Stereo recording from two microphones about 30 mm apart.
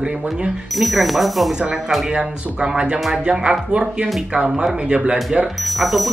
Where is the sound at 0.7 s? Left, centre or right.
Centre.